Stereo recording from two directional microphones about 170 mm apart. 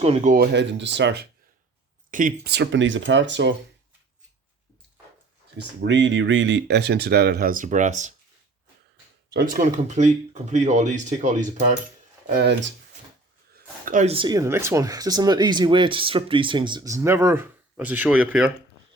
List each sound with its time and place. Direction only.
0.0 s speech: 40° right (ahead or behind)
0.5 s speech: 90° right
2.0 s speech: 55° right (ahead or behind); by 3.5 s 90° right
5.5 s speech: 90° right; by 8.1 s 45° right (ahead or behind)
9.5 s speech: 50° right (ahead or behind)
12.3 s speech: 70° right (ahead or behind)
13.8 s speech: 50° right (ahead or behind)
14.1 s speech: 25° right (ahead or behind); by 18.5 s 5° right (ahead or behind)